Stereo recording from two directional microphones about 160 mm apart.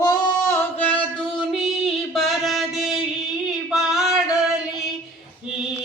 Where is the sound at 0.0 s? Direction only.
25° left (ahead or behind).